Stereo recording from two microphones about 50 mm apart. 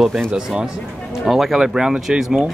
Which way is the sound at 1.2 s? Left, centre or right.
Centre.